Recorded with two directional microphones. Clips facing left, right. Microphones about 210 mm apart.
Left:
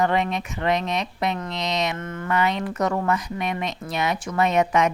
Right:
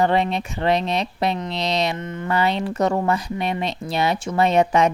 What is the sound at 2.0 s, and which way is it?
Speech, 20° right (ahead or behind).